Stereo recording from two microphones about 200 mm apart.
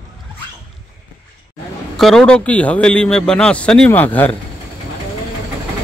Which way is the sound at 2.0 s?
Centre (ahead or behind).